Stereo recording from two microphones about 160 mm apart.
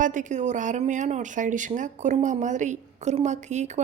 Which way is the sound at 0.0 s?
55° right (ahead or behind).